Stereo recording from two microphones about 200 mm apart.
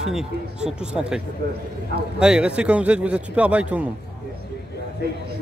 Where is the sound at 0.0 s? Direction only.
5° right (ahead or behind).